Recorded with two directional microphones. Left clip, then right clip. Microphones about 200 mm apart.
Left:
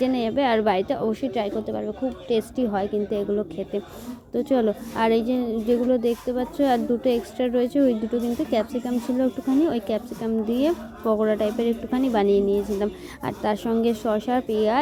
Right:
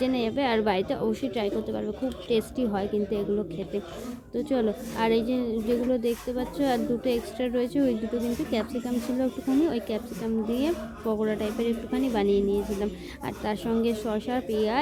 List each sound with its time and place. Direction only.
0.0 s a woman's voice: 15° left (ahead or behind)
4.4 s a woman's voice: 20° left (ahead or behind)